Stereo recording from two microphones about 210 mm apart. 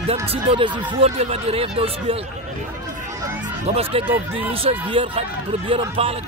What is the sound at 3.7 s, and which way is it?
Speech, 30° right (ahead or behind).